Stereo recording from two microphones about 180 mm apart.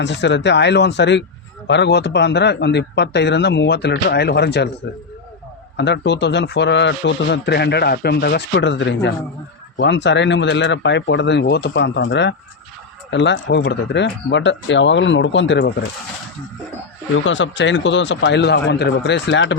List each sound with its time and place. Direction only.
0.0 s a man's voice: 75° left (ahead or behind)
5.7 s a man's voice: 70° left (ahead or behind)
17.2 s a man's voice: 90° left